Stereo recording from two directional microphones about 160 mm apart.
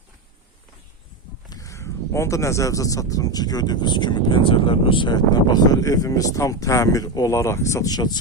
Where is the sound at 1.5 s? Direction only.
20° left (ahead or behind).